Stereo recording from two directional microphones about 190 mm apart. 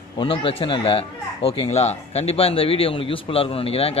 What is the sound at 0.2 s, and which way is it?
Speech, 25° left (ahead or behind).